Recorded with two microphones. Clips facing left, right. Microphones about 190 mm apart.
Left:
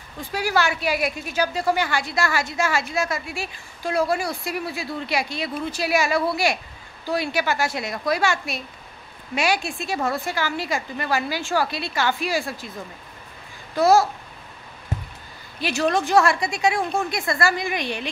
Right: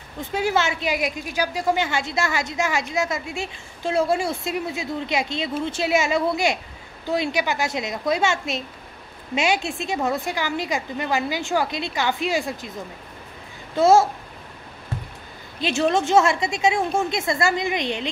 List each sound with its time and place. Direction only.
0.2 s a woman's voice: 20° right (ahead or behind)
13.7 s a woman's voice: 25° right (ahead or behind)
15.6 s a woman's voice: 25° right (ahead or behind)